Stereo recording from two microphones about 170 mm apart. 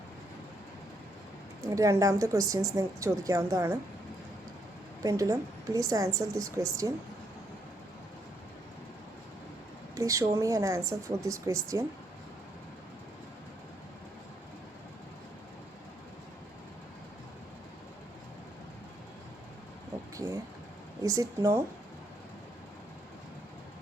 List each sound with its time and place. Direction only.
1.6 s speech: 20° right (ahead or behind)
5.0 s speech: 20° right (ahead or behind)
9.9 s speech: 20° right (ahead or behind)
20.1 s vehicle: 20° right (ahead or behind)
21.0 s speech: 20° right (ahead or behind)